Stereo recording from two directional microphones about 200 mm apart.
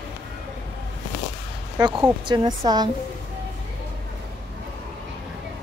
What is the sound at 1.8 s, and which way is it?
A woman's voice, 20° right (ahead or behind).